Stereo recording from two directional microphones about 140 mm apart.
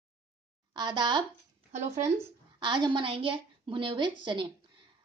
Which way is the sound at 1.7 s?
55° right (ahead or behind).